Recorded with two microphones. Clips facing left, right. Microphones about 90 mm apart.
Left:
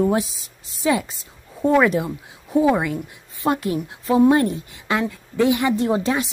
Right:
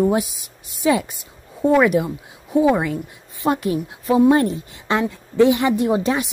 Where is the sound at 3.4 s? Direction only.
20° right (ahead or behind).